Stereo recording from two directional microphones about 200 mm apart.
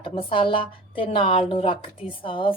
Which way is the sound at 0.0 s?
25° left (ahead or behind).